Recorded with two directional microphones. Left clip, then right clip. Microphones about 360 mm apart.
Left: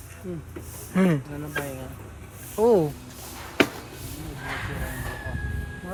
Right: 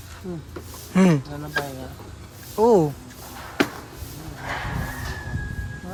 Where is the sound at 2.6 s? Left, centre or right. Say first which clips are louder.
Right 3 dB; centre.